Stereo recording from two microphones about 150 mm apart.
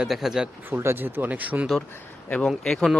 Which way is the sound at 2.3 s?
5° left (ahead or behind).